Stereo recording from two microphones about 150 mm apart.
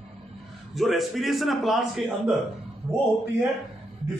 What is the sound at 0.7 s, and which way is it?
A man's voice, centre (ahead or behind).